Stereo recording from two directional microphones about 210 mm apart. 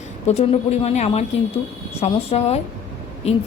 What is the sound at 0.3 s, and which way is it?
A woman's voice, 30° left (ahead or behind).